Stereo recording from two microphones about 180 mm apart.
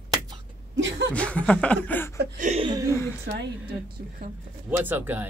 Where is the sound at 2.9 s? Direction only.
15° left (ahead or behind).